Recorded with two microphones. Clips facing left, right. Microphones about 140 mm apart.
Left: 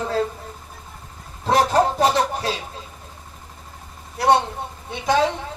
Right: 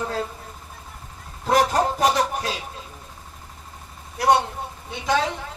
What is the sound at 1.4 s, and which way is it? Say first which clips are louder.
Speech: left 2 dB; 30° left (ahead or behind).